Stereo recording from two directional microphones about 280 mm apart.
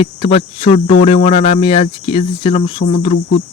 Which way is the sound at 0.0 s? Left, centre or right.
Centre.